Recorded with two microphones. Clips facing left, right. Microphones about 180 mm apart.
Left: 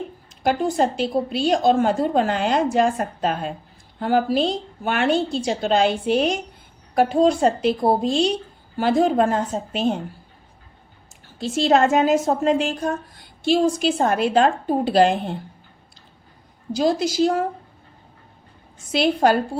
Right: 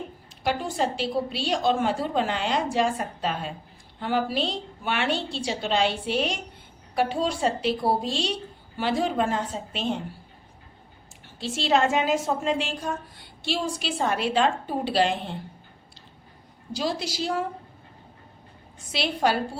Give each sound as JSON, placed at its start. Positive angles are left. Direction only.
{"t": 0.4, "sound": "a woman's voice", "side_deg": 45}
{"t": 11.3, "sound": "a woman's voice", "side_deg": 45}
{"t": 16.7, "sound": "a woman's voice", "side_deg": 45}
{"t": 18.9, "sound": "a woman's voice", "side_deg": 45}